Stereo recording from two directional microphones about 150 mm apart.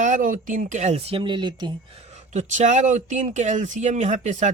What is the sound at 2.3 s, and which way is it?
Speech, 55° right (ahead or behind).